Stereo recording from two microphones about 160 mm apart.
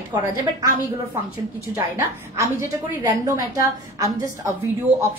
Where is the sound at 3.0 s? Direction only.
20° right (ahead or behind).